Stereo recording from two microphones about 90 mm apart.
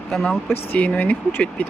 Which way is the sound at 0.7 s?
15° left (ahead or behind).